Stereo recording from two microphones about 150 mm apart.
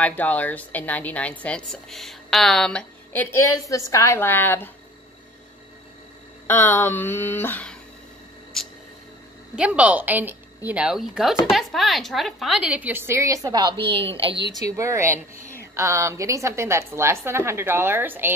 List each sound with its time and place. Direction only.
0.0 s a woman's voice: 10° left (ahead or behind)
6.4 s a woman's voice: 10° left (ahead or behind)
8.6 s a sound: 5° left (ahead or behind)
9.6 s a woman's voice: 10° right (ahead or behind); by 14.5 s 35° right (ahead or behind)
14.8 s a woman's voice: 20° right (ahead or behind)